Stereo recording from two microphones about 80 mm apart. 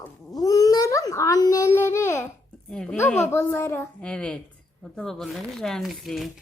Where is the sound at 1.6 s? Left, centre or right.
Left.